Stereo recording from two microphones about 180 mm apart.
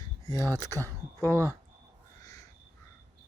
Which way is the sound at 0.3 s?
15° left (ahead or behind).